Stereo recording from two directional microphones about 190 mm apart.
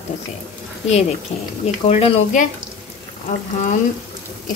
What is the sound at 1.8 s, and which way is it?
Speech, 40° left (ahead or behind).